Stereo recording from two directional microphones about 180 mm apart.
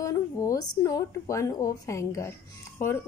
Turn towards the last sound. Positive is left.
turn(degrees=15)  # may be behind; listen again after turning